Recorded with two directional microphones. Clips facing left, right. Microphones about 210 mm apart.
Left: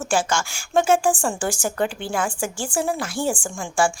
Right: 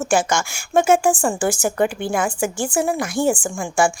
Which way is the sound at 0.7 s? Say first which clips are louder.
Right 3 dB; 10° right (ahead or behind).